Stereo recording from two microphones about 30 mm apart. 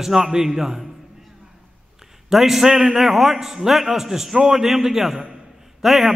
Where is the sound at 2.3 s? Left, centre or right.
Centre.